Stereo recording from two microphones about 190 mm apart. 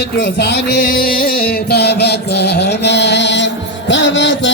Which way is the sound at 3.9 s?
70° left (ahead or behind).